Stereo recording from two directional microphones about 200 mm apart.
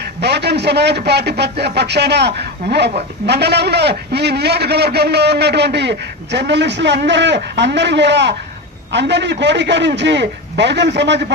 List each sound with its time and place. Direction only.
0.0 s a man's voice: 55° right (ahead or behind)